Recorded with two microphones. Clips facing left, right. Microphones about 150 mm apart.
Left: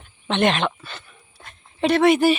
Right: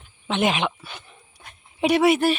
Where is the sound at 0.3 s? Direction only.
5° right (ahead or behind).